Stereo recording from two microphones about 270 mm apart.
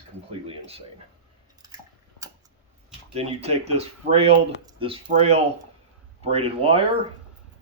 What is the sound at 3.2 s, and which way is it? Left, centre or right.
Speech, right.